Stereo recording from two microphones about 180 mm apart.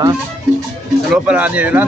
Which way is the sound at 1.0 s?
5° right (ahead or behind).